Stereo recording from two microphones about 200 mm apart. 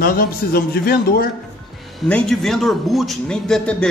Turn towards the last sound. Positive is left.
turn(degrees=5)  # may be behind; listen again after turning